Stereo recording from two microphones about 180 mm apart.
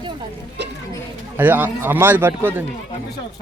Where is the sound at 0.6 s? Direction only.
75° right (ahead or behind).